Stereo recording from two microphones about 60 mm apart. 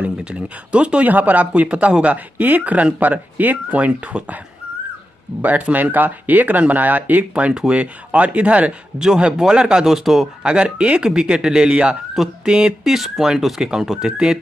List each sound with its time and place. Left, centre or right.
0.0 s speech: centre
5.4 s speech: right; by 14.4 s centre